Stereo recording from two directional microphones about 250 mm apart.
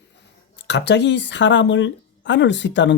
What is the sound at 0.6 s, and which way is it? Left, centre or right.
Speech, left.